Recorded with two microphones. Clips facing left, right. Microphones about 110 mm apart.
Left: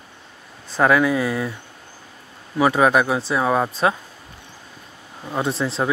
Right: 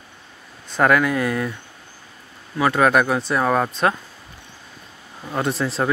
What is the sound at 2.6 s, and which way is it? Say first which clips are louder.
Speech: left 1 dB; 10° left (ahead or behind).